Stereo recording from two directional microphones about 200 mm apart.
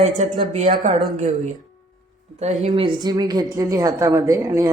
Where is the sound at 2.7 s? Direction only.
20° right (ahead or behind).